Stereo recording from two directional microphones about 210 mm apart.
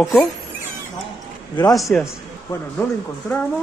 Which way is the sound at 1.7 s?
Centre (ahead or behind).